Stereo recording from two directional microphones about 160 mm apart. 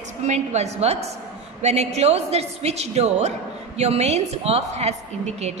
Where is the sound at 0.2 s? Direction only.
45° right (ahead or behind).